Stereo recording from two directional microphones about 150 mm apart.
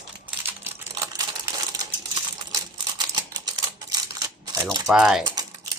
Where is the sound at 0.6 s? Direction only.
20° right (ahead or behind).